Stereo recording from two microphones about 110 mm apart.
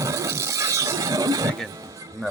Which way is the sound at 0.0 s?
30° right (ahead or behind).